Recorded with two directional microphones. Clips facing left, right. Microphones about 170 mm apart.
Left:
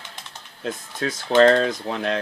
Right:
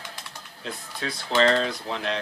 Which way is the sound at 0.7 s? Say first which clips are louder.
Left 6 dB; 45° left (ahead or behind).